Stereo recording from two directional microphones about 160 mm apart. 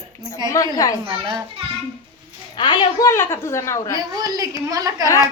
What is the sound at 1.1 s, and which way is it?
Speech, 35° right (ahead or behind).